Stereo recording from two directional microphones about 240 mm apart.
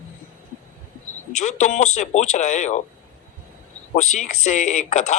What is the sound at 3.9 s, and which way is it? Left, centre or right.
Speech, left.